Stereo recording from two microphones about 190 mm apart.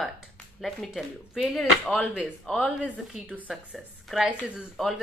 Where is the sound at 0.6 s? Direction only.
Centre (ahead or behind).